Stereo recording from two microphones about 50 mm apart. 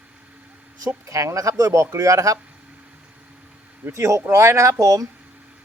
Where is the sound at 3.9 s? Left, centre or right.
Right.